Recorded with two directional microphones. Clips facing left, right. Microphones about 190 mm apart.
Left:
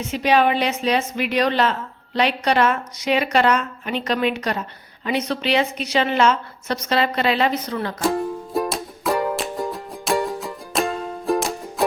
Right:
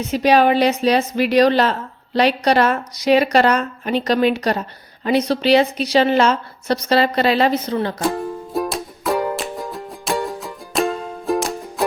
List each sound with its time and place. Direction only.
0.0 s a woman's voice: 40° right (ahead or behind)
8.0 s music: centre (ahead or behind)